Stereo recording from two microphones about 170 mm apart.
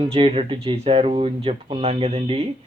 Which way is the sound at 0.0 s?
35° right (ahead or behind).